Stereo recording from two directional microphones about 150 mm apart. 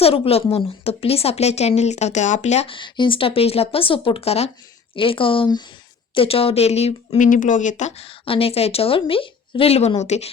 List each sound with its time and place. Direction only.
0.0 s a woman's voice: 40° left (ahead or behind)
7.3 s speech: 60° left (ahead or behind)